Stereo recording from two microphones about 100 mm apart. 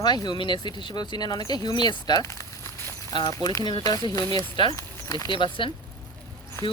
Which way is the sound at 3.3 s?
35° left (ahead or behind).